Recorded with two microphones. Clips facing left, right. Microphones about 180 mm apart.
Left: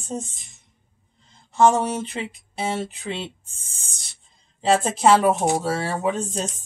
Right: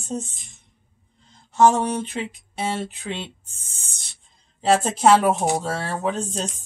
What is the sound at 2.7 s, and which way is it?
Speech, 5° left (ahead or behind).